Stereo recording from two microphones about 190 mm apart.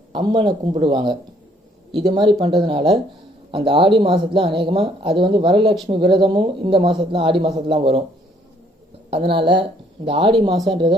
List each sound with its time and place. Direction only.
0.1 s speech: 25° right (ahead or behind)
9.4 s speech: 25° right (ahead or behind)